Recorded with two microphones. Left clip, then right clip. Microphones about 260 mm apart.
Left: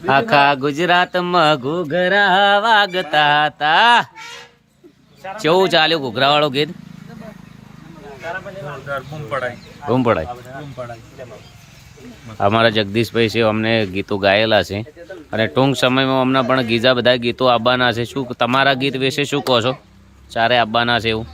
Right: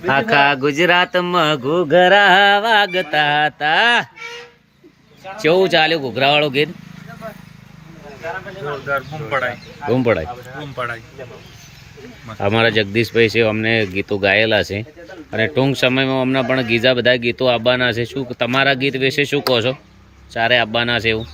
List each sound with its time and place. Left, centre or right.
0.0 s speech: centre
5.4 s speech: centre
8.9 s speech: centre
9.9 s speech: centre
12.4 s speech: centre